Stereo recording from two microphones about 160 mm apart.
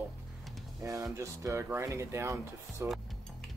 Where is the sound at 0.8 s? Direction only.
20° right (ahead or behind).